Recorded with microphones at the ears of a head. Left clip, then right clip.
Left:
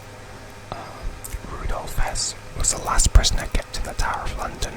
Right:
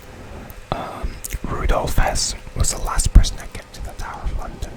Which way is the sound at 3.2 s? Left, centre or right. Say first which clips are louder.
Left 6 dB; left.